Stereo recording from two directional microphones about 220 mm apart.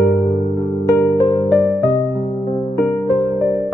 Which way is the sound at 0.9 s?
15° left (ahead or behind).